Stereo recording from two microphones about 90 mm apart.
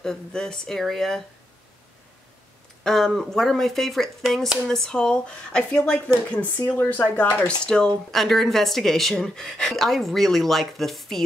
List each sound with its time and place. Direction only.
0.0 s speech: 5° left (ahead or behind)
2.8 s speech: 5° left (ahead or behind)